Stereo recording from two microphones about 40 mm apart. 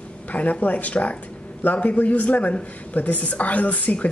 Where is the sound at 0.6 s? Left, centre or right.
Left.